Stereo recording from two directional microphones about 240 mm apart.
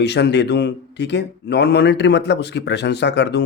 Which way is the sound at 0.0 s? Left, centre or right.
Left.